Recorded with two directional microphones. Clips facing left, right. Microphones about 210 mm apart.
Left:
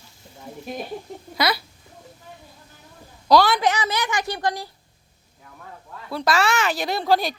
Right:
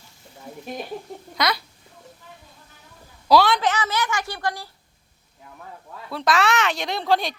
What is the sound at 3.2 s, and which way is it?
Speech, centre (ahead or behind).